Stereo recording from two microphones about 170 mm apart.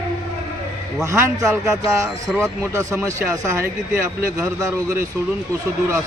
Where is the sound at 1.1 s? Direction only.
20° right (ahead or behind).